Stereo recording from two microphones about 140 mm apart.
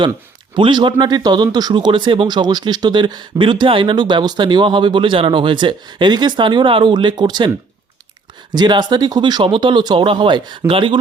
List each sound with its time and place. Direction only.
0.5 s speech: 35° right (ahead or behind)
8.5 s speech: 30° right (ahead or behind)